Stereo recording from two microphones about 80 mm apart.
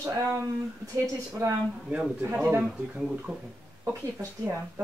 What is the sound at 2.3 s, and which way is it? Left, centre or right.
Speech, centre.